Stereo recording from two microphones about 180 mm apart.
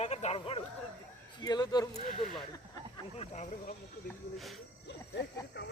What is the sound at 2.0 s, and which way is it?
Speech, centre (ahead or behind).